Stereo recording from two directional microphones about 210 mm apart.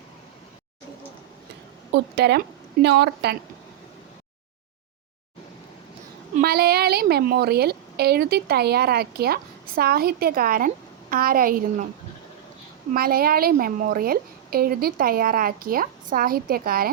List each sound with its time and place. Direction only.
1.9 s a woman's voice: 50° right (ahead or behind)
6.3 s a woman's voice: 45° right (ahead or behind)
12.9 s a woman's voice: 45° right (ahead or behind)